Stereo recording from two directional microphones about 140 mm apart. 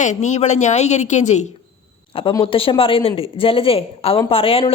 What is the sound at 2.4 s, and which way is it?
A woman's voice, 40° left (ahead or behind).